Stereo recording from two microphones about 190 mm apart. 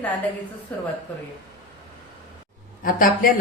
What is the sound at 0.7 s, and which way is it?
Speech, 10° left (ahead or behind).